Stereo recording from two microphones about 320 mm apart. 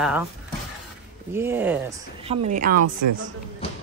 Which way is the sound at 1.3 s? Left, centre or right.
Centre.